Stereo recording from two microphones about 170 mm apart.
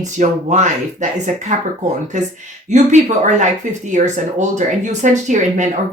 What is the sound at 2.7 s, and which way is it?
A woman's voice, 45° right (ahead or behind).